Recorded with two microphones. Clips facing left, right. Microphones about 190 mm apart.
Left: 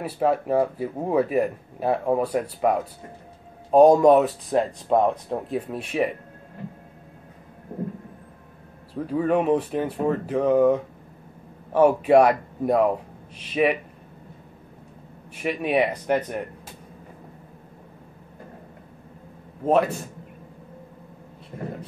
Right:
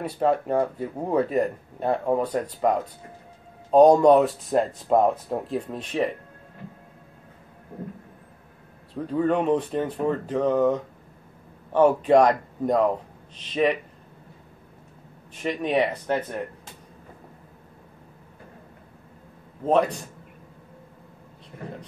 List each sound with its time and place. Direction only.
0.0 s speech: 5° left (ahead or behind)
5.7 s speech: 10° left (ahead or behind)
9.0 s speech: 5° left (ahead or behind)
15.3 s speech: 10° left (ahead or behind)
19.6 s speech: 10° left (ahead or behind)